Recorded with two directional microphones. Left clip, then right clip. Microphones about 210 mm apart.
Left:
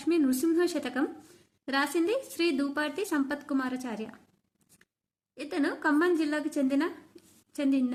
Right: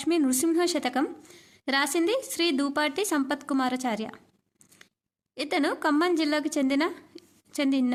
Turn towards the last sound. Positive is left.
turn(degrees=-35)  # may be behind; listen again after turning